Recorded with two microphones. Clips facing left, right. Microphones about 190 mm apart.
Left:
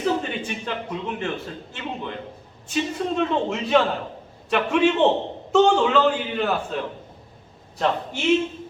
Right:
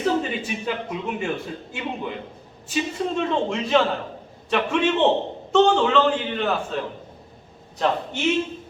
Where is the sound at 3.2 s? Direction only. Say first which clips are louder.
Even; 5° left (ahead or behind).